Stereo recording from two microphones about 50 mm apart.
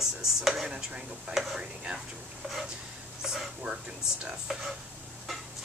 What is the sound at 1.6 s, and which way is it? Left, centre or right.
Speech, centre.